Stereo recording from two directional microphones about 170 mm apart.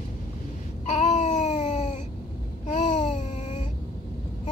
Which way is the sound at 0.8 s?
40° left (ahead or behind).